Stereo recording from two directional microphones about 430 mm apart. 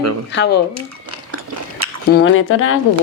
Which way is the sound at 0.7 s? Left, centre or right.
Right.